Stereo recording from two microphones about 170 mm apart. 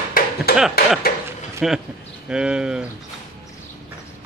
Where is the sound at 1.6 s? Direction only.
5° right (ahead or behind).